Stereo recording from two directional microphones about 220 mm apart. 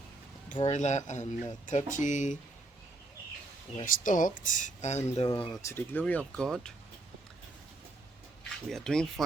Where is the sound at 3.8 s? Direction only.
35° left (ahead or behind).